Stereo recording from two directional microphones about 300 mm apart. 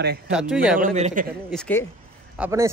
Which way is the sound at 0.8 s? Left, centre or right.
Right.